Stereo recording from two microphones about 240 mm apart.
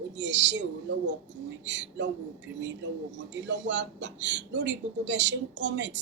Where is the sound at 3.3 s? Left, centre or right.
Right.